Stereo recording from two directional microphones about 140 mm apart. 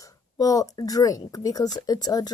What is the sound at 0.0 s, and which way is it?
Speech, 25° left (ahead or behind).